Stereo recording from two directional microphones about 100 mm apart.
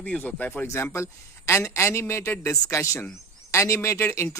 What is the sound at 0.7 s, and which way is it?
A man's voice, 25° left (ahead or behind).